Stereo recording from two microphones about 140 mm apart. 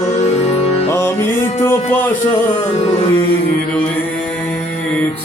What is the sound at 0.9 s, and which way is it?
Music, 15° left (ahead or behind).